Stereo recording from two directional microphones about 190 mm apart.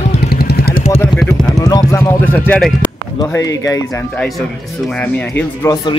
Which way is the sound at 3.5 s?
15° left (ahead or behind).